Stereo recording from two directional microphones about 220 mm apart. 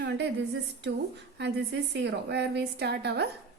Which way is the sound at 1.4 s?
50° right (ahead or behind).